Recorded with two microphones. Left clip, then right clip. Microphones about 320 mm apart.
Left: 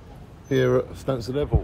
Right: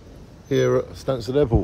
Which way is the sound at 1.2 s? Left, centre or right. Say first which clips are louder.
Right 11 dB; right.